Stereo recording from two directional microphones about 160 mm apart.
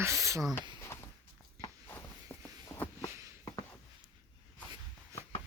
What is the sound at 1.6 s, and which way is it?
Walk, 10° left (ahead or behind).